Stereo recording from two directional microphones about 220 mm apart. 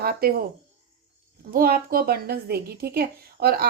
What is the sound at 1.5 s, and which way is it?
A woman's voice, 45° right (ahead or behind).